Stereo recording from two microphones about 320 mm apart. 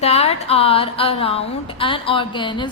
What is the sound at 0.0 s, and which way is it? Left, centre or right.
A woman's voice, centre.